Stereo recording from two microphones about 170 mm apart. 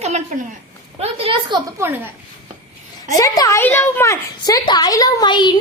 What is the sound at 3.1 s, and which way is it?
A woman's voice, 20° left (ahead or behind).